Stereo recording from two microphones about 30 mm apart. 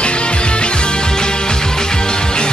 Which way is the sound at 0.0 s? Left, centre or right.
Left.